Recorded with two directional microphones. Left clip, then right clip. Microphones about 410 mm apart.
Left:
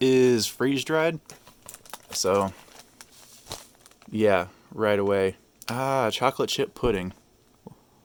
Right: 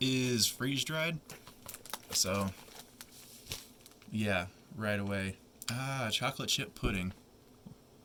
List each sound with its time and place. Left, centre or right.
0.0 s speech: centre
1.6 s crumpling: centre
2.2 s speech: centre
4.1 s speech: centre